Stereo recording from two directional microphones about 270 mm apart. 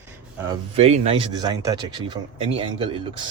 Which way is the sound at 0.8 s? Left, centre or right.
Right.